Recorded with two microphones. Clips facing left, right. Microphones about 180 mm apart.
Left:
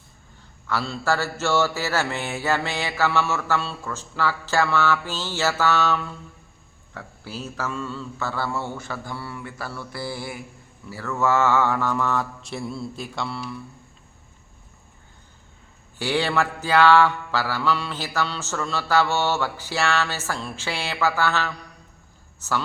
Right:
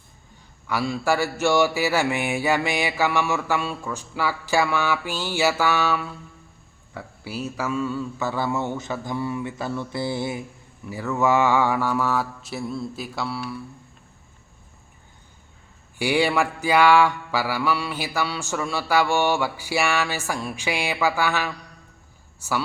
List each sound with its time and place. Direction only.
0.7 s mantra: 15° right (ahead or behind)
16.0 s mantra: 15° right (ahead or behind)
22.4 s a man's voice: 10° right (ahead or behind)